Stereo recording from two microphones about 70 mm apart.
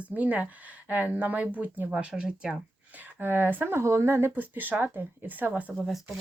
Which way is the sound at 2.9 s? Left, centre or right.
Right.